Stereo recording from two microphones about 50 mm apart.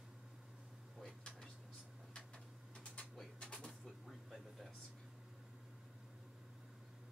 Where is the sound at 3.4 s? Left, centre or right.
Centre.